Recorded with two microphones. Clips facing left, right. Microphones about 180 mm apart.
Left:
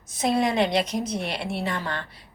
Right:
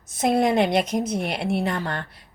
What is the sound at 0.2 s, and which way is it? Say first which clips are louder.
A woman's voice: right 3 dB; 55° right (ahead or behind).